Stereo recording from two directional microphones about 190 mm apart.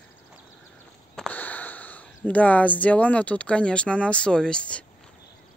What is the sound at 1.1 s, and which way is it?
Speech, 5° left (ahead or behind).